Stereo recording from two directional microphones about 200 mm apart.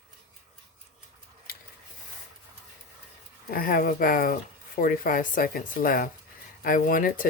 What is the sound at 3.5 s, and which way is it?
Speech, 45° left (ahead or behind).